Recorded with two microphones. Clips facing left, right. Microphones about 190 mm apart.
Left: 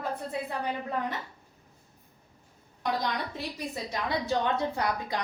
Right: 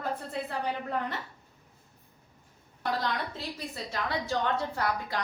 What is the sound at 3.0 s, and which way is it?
A woman's voice, 15° left (ahead or behind).